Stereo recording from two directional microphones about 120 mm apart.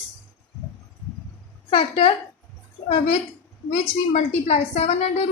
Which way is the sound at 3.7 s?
65° left (ahead or behind).